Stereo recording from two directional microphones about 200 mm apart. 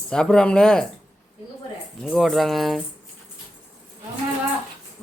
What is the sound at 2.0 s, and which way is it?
Speech, centre (ahead or behind).